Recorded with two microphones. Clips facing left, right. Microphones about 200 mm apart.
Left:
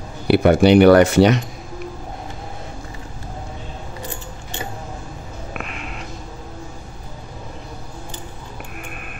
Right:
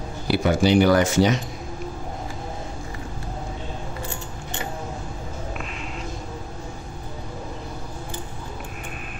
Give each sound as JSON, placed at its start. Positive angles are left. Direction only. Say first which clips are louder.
{"t": 0.3, "sound": "speech", "louder": "left 6 dB", "side_deg": 60}
{"t": 5.5, "sound": "cat", "louder": "left 1 dB", "side_deg": 65}